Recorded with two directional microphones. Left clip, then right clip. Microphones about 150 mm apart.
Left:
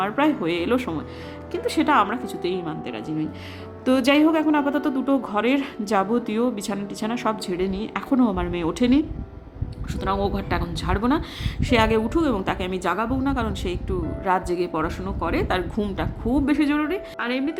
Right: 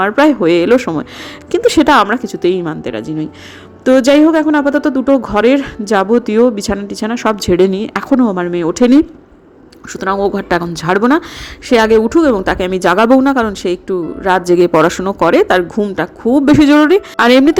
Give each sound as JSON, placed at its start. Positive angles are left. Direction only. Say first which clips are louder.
{"t": 0.0, "sound": "speech", "louder": "right 12 dB", "side_deg": -40}
{"t": 7.4, "sound": "speech", "louder": "right 15 dB", "side_deg": -50}
{"t": 8.1, "sound": "speech", "louder": "right 9 dB", "side_deg": -30}
{"t": 9.9, "sound": "speech", "louder": "right 10 dB", "side_deg": -35}
{"t": 14.5, "sound": "speech", "louder": "right 16 dB", "side_deg": -55}
{"t": 16.5, "sound": "a woman's voice", "louder": "right 17 dB", "side_deg": -55}